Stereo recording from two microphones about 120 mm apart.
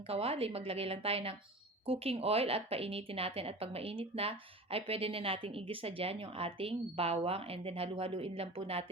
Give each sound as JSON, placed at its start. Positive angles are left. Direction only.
{"t": 0.1, "sound": "a woman's voice", "side_deg": -55}